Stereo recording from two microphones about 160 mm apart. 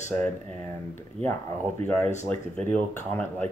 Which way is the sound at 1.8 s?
10° left (ahead or behind).